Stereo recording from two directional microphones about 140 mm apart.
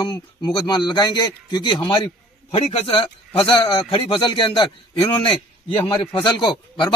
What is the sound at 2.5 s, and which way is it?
A man's voice, 45° left (ahead or behind).